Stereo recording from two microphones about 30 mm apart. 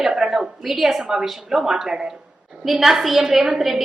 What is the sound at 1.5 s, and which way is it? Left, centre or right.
Speech, centre.